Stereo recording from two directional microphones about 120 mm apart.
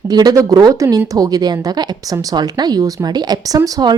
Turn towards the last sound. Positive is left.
turn(degrees=-30)  # may be behind; listen again after turning